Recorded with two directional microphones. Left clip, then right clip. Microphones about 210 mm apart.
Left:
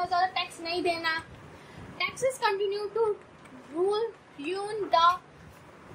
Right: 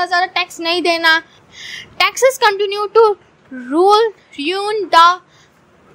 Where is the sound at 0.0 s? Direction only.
45° right (ahead or behind).